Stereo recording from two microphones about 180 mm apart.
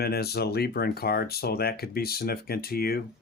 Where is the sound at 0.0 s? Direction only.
60° left (ahead or behind).